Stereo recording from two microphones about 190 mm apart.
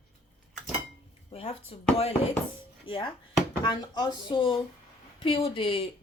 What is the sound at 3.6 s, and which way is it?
Speech, 25° left (ahead or behind).